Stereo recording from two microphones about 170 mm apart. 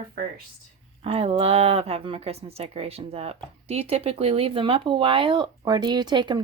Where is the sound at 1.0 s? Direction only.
35° right (ahead or behind).